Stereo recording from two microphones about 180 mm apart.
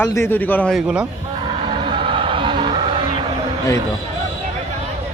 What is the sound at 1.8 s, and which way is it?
Music, 30° right (ahead or behind).